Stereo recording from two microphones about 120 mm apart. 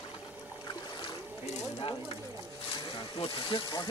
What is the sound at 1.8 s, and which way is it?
Speech, 45° left (ahead or behind).